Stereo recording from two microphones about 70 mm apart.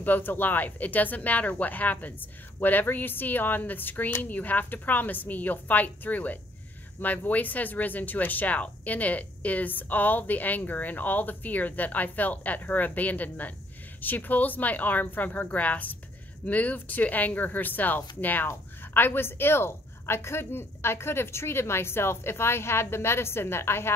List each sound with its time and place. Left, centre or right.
0.0 s speech: left